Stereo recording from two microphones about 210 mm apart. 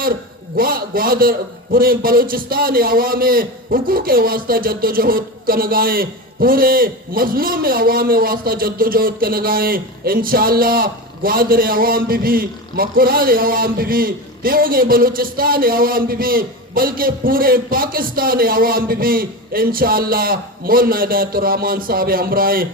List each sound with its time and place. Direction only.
0.5 s a man's voice: 45° right (ahead or behind)